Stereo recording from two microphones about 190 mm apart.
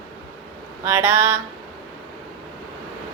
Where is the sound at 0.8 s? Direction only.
10° right (ahead or behind).